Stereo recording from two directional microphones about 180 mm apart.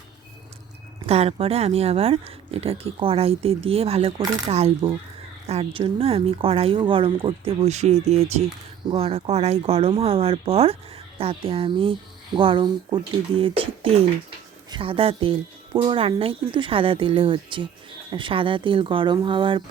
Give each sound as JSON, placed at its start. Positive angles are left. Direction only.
{"t": 1.0, "sound": "speech", "side_deg": -35}